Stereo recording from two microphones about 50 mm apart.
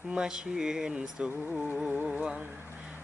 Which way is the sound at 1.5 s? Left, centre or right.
Centre.